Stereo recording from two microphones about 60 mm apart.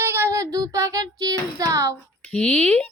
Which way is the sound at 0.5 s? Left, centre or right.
Right.